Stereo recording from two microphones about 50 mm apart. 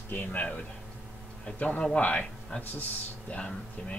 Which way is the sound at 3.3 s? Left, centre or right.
Left.